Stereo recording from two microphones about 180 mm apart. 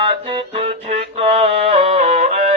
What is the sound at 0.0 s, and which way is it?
Music, 30° right (ahead or behind).